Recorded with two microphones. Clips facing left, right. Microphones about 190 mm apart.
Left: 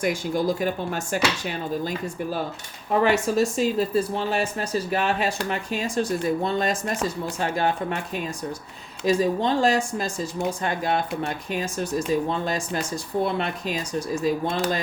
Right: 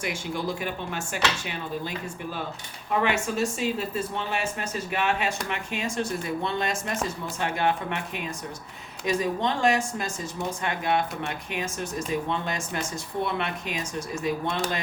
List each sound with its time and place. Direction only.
0.0 s speech: 40° left (ahead or behind)